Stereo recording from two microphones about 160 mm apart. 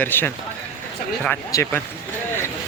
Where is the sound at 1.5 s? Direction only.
15° left (ahead or behind).